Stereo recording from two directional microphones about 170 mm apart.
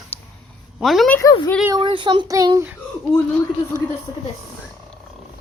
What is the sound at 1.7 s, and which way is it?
Child singing, 30° right (ahead or behind).